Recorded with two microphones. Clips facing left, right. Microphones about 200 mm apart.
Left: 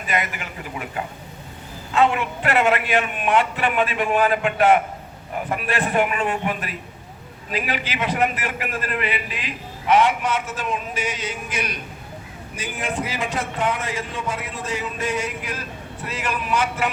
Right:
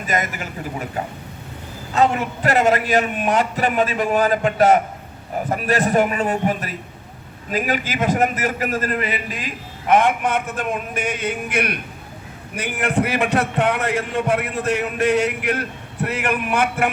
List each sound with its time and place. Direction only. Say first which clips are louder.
0.0 s a man's voice: right 2 dB; 40° right (ahead or behind)